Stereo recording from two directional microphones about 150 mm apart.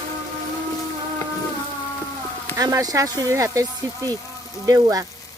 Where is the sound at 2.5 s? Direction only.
25° right (ahead or behind).